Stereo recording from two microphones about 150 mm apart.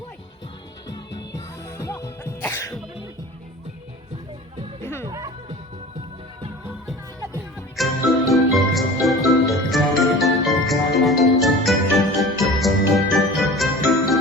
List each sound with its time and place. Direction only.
0.9 s music: 20° left (ahead or behind)
4.8 s music: 15° left (ahead or behind)
5.0 s music: 25° right (ahead or behind)
7.8 s jingle: centre (ahead or behind)
9.5 s music: centre (ahead or behind)